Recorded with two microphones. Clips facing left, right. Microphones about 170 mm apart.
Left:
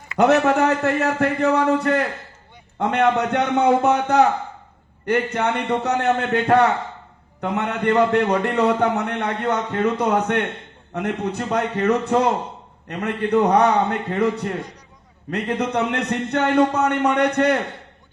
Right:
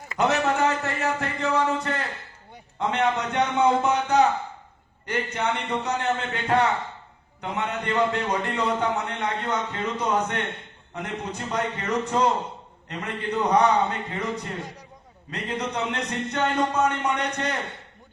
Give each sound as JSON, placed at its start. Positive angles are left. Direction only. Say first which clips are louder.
{"t": 0.2, "sound": "a man's voice", "louder": "left 6 dB", "side_deg": 60}